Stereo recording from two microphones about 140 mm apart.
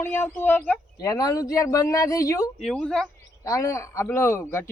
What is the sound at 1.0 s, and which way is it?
A man's voice, 25° left (ahead or behind).